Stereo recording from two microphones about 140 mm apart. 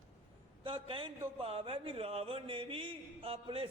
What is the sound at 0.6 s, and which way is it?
A man's voice, 40° right (ahead or behind).